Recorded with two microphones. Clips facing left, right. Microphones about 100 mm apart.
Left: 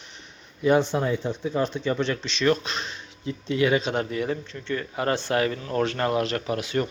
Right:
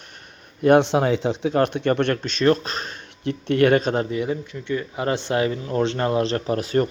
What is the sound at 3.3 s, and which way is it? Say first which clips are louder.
Speech: right 5 dB; 60° right (ahead or behind).